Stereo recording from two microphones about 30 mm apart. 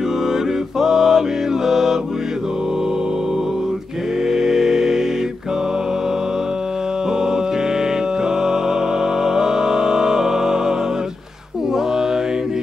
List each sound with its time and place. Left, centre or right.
0.7 s mantra: centre
4.3 s mantra: centre
8.4 s music: centre